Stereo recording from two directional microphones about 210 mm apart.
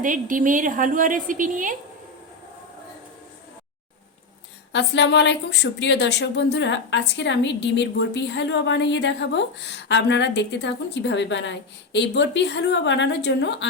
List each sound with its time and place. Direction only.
0.0 s a woman's voice: 40° right (ahead or behind)
4.7 s a woman's voice: 55° left (ahead or behind)